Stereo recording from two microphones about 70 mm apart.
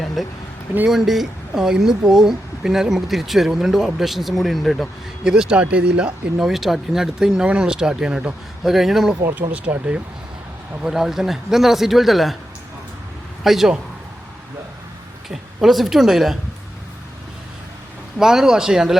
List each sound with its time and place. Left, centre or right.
0.2 s speech: centre
5.2 s speech: centre
9.3 s speech: centre
10.8 s speech: centre
13.4 s speech: centre
15.3 s speech: centre
18.2 s speech: centre